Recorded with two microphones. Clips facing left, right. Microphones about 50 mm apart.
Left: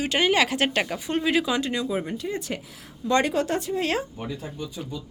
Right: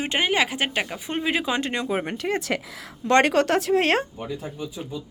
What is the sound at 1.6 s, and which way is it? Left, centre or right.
A woman's voice, right.